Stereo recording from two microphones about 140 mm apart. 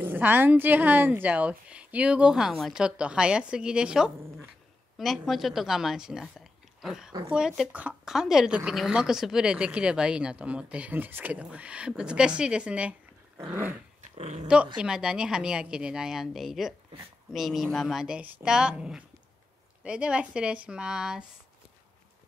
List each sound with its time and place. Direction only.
0.0 s a woman's voice: 15° right (ahead or behind)
14.0 s speech: 55° right (ahead or behind)
14.8 s a woman's voice: 5° right (ahead or behind)